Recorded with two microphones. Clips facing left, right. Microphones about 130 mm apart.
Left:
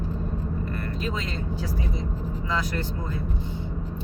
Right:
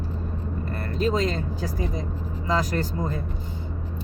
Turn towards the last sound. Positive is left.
turn(degrees=-40)  # may be behind; listen again after turning